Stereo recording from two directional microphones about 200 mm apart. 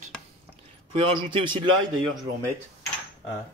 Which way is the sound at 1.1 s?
25° right (ahead or behind).